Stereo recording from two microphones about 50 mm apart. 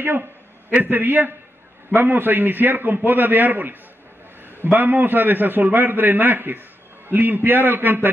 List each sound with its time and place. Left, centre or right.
0.7 s a man's voice: right